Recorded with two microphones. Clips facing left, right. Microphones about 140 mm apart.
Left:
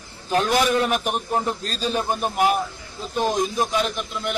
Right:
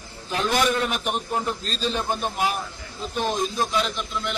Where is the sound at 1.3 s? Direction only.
40° left (ahead or behind).